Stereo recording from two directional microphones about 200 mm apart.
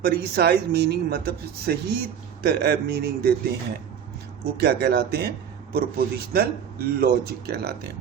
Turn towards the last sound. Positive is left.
turn(degrees=-55)  # may be behind; listen again after turning